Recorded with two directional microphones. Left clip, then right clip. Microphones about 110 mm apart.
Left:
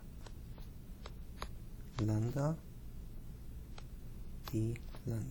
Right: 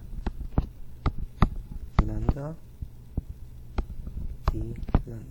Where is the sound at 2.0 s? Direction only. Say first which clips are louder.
Right 3 dB; 20° left (ahead or behind).